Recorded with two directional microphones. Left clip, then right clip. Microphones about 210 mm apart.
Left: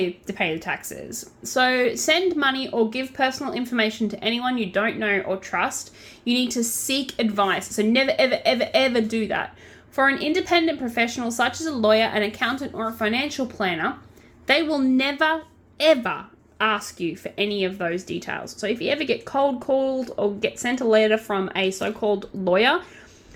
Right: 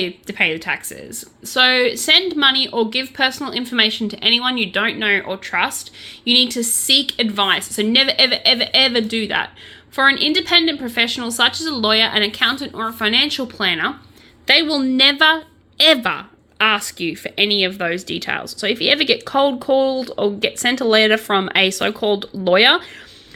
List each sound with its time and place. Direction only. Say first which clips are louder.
0.0 s a woman's voice: right 6 dB; centre (ahead or behind)